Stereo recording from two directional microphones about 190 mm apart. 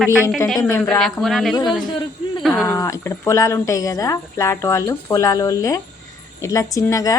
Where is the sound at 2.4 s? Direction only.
Centre (ahead or behind).